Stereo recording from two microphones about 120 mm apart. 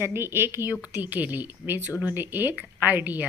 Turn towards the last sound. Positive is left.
turn(degrees=-15)  # may be behind; listen again after turning